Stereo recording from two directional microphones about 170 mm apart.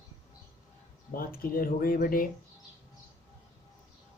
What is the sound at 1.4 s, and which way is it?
Speech, 60° left (ahead or behind).